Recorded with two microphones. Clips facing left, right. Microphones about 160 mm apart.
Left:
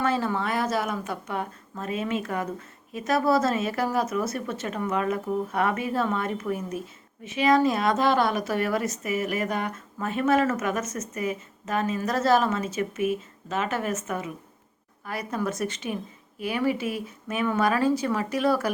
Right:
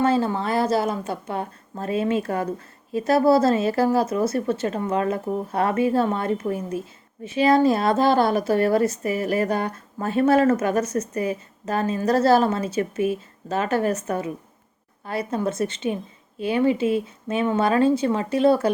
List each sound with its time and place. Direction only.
0.0 s speech: 30° right (ahead or behind)